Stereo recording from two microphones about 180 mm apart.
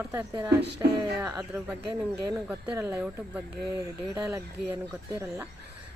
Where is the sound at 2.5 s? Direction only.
15° right (ahead or behind).